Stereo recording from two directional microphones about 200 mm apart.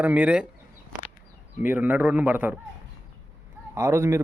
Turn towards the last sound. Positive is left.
turn(degrees=-15)  # may be behind; listen again after turning